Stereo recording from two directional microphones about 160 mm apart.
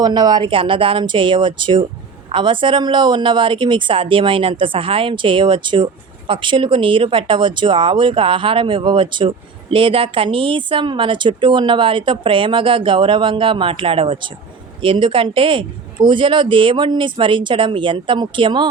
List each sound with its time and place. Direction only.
0.0 s a woman's voice: 25° right (ahead or behind)